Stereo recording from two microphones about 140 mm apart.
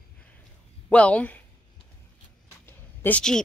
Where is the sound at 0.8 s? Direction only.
10° left (ahead or behind).